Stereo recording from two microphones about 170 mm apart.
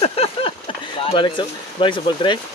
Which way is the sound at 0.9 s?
30° left (ahead or behind).